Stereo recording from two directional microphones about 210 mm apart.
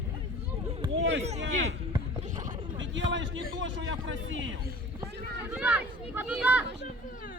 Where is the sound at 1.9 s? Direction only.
35° right (ahead or behind).